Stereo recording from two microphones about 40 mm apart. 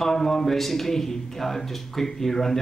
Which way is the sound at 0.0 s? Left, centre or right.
Centre.